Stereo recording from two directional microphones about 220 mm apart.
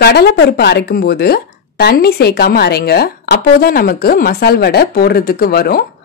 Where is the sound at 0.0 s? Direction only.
45° left (ahead or behind).